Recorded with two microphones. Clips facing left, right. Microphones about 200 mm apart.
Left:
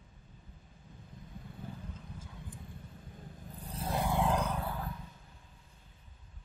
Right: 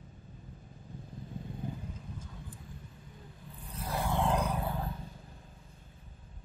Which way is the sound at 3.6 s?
35° left (ahead or behind).